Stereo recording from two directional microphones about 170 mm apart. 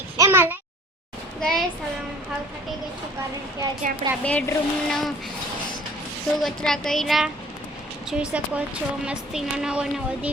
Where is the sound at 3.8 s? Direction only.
50° right (ahead or behind).